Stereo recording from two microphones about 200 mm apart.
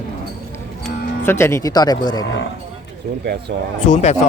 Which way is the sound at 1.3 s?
15° left (ahead or behind).